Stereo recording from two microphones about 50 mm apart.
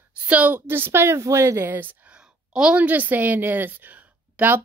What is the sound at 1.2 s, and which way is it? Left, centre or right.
Speech, right.